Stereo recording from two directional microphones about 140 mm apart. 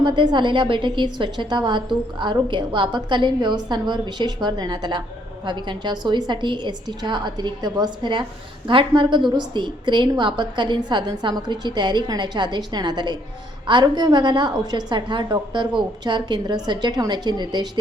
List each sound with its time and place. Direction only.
0.0 s a woman's voice: 35° right (ahead or behind)